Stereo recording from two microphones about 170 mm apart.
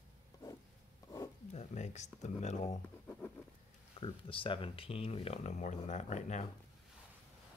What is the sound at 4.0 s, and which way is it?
Speech, 30° left (ahead or behind).